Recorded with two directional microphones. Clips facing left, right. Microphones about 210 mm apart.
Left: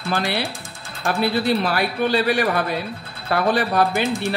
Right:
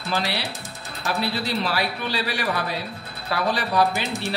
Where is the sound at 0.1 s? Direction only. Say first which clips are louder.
Left 3 dB; 50° left (ahead or behind).